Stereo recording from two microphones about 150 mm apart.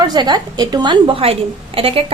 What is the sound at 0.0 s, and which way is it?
A woman's voice, 30° right (ahead or behind).